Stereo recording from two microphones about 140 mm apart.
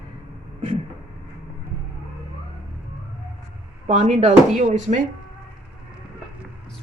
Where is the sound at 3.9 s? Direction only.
50° right (ahead or behind).